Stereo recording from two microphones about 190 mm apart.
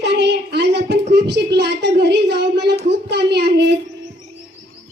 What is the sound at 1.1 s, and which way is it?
A woman's voice, 60° right (ahead or behind).